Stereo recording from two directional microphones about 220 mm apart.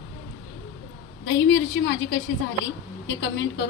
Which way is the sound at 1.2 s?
55° left (ahead or behind).